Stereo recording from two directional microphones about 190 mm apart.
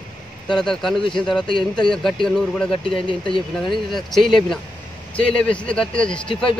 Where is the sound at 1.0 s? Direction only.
25° left (ahead or behind).